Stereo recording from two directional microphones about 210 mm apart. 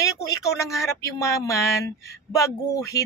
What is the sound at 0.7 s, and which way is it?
Speech, 15° left (ahead or behind).